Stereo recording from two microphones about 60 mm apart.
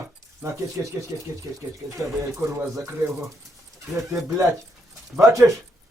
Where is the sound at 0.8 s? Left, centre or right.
Right.